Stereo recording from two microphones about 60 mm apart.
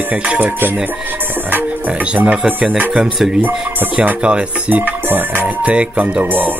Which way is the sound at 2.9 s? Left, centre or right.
Centre.